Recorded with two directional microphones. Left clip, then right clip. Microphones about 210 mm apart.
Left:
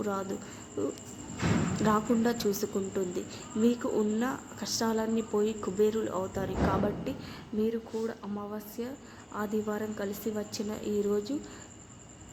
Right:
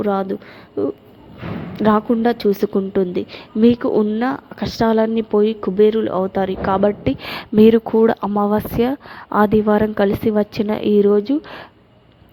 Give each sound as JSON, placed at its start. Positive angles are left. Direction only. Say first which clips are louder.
{"t": 0.0, "sound": "speech", "louder": "right 14 dB", "side_deg": -30}
{"t": 1.7, "sound": "speech", "louder": "right 14 dB", "side_deg": -30}